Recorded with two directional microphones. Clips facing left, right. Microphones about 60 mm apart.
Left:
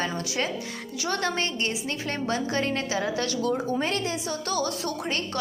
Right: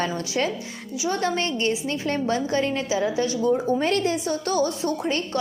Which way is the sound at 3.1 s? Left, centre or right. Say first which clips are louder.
Right 4 dB; centre.